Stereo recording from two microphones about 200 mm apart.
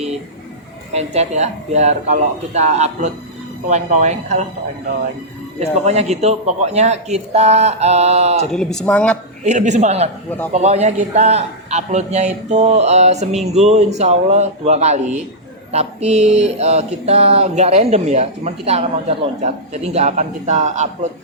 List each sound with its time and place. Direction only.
0.9 s mantra: 35° right (ahead or behind)
5.5 s mantra: 35° right (ahead or behind)
8.5 s speech: 5° left (ahead or behind)
9.4 s mantra: 35° right (ahead or behind)